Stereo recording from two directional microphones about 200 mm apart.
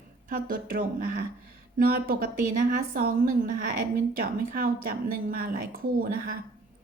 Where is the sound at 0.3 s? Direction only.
45° right (ahead or behind).